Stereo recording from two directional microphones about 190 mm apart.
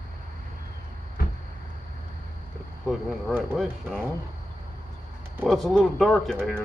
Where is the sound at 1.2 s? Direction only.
50° left (ahead or behind).